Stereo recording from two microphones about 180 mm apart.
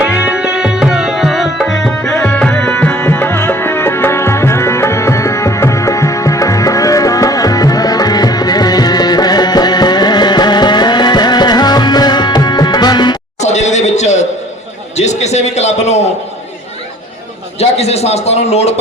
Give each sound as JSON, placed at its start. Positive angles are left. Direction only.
{"t": 0.0, "sound": "tabla", "side_deg": -5}
{"t": 13.4, "sound": "a sound", "side_deg": 40}
{"t": 17.6, "sound": "a man's voice", "side_deg": 35}